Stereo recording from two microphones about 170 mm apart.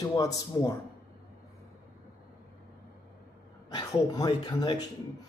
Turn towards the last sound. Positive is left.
turn(degrees=25)  # may be behind; listen again after turning